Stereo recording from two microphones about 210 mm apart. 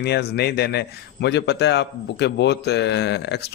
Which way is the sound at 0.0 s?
50° left (ahead or behind).